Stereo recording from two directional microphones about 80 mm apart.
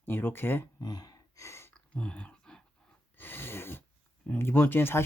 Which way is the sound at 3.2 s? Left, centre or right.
Left.